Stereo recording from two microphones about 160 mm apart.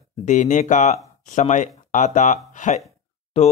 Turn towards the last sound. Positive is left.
turn(degrees=40)  # may be behind; listen again after turning